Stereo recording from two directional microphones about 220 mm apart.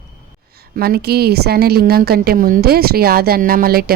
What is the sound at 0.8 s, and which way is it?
Speech, 45° right (ahead or behind).